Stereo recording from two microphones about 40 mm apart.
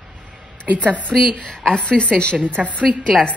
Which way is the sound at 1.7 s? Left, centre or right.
Left.